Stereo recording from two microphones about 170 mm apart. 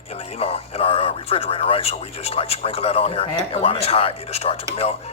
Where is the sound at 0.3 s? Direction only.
35° left (ahead or behind).